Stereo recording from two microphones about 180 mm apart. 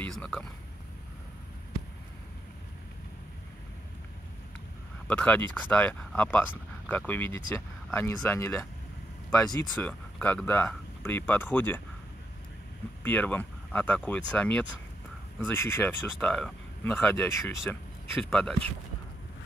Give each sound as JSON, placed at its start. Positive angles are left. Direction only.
{"t": 0.0, "sound": "speech", "side_deg": 5}
{"t": 5.0, "sound": "speech", "side_deg": 5}
{"t": 9.8, "sound": "speech", "side_deg": 10}
{"t": 13.0, "sound": "speech", "side_deg": 10}